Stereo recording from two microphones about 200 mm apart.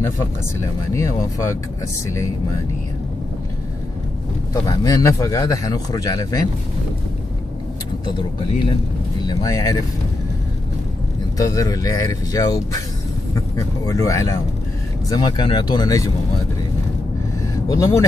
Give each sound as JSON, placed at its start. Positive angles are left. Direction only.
{"t": 0.9, "sound": "speech", "side_deg": 15}
{"t": 4.6, "sound": "speech", "side_deg": 20}
{"t": 8.0, "sound": "speech", "side_deg": 25}
{"t": 11.3, "sound": "speech", "side_deg": 15}
{"t": 13.8, "sound": "speech", "side_deg": 15}
{"t": 17.6, "sound": "speech", "side_deg": 15}